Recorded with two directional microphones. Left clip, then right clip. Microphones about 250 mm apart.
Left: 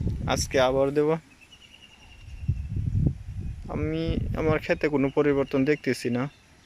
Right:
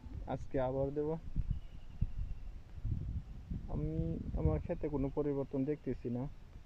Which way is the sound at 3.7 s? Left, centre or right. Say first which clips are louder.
Left 13 dB; left.